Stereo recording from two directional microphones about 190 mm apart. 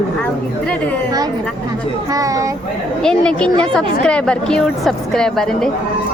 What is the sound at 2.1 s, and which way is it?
Speech, 15° right (ahead or behind).